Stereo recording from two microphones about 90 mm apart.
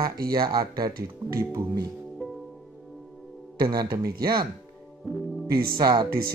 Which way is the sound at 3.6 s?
50° right (ahead or behind).